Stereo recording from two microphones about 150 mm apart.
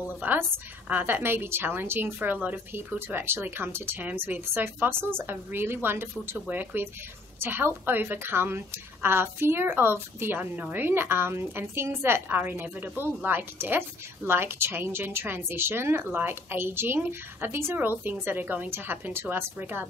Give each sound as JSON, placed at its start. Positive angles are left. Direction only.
{"t": 0.2, "sound": "a woman's voice", "side_deg": -10}